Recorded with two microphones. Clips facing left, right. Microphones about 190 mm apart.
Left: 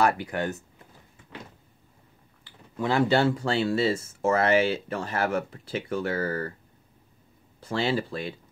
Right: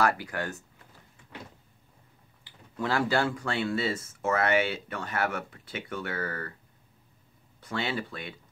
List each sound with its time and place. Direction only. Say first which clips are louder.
0.0 s speech: left 3 dB; 20° left (ahead or behind)
2.8 s speech: left 5 dB; 20° left (ahead or behind)
7.6 s speech: left 6 dB; 30° left (ahead or behind)